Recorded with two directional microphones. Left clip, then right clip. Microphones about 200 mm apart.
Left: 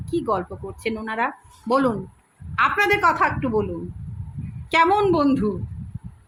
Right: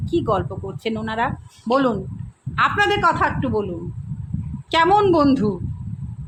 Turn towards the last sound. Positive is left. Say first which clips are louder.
# right 3 dB
turn(degrees=-10)  # may be behind; listen again after turning